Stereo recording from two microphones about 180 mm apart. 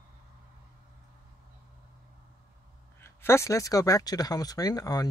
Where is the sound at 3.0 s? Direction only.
15° left (ahead or behind).